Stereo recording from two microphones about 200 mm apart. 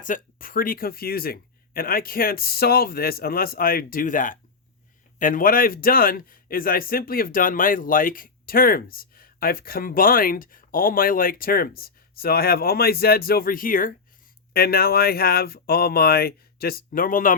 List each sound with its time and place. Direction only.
0.0 s a man's voice: 40° left (ahead or behind)